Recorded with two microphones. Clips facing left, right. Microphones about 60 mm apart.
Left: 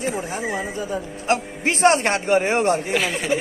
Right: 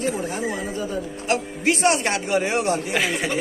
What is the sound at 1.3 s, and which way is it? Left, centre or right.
Speech, left.